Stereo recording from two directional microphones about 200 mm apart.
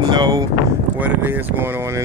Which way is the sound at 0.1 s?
20° right (ahead or behind).